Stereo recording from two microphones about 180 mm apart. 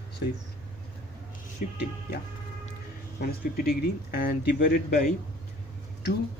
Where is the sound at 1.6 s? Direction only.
50° left (ahead or behind).